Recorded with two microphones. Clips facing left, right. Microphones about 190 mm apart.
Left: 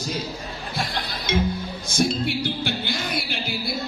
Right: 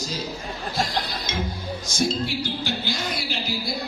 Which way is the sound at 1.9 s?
60° left (ahead or behind).